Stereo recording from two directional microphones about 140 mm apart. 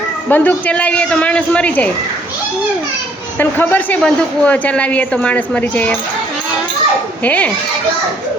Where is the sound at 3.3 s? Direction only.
15° left (ahead or behind).